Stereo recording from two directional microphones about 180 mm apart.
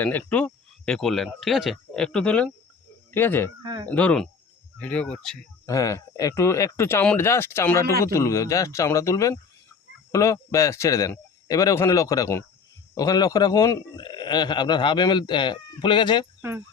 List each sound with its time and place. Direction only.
0.0 s speech: 10° left (ahead or behind)
5.6 s a man's voice: 20° left (ahead or behind)